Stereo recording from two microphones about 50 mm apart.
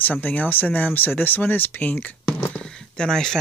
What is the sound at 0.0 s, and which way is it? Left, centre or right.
Speech, left.